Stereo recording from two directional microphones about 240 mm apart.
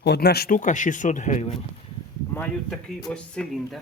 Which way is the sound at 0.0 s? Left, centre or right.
Left.